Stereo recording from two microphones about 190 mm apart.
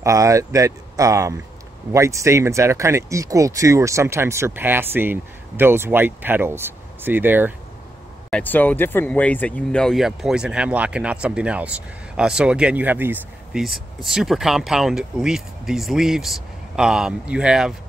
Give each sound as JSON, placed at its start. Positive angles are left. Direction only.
{"t": 0.0, "sound": "speech", "side_deg": -15}
{"t": 8.3, "sound": "speech", "side_deg": 10}